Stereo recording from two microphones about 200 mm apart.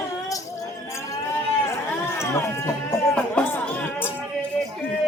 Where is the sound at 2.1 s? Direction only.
15° left (ahead or behind).